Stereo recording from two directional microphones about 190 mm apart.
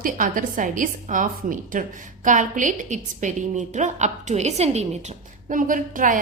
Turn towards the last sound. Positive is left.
turn(degrees=-45)  # may be behind; listen again after turning